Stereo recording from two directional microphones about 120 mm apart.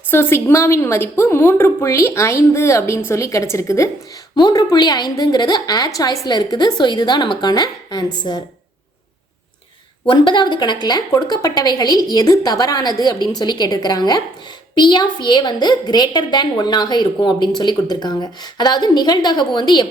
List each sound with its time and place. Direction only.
0.1 s a woman's voice: 20° left (ahead or behind)
4.4 s a woman's voice: 35° left (ahead or behind)
10.1 s a woman's voice: 40° left (ahead or behind)